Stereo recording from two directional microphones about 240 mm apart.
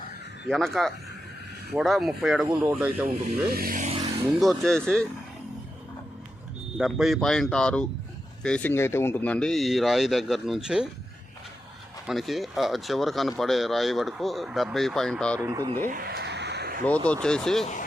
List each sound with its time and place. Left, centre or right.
0.4 s speech: centre
2.5 s speech: centre
2.7 s speech: centre
3.5 s vehicle: right
4.4 s speech: centre
6.7 s speech: centre
12.0 s speech: centre
15.4 s speech: centre
15.9 s a sound: right
16.8 s speech: centre